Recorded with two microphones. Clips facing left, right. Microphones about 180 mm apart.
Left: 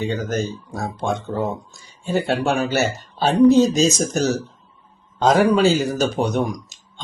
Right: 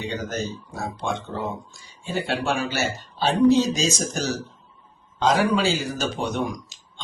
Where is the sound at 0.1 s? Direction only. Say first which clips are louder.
Left 5 dB; 50° left (ahead or behind).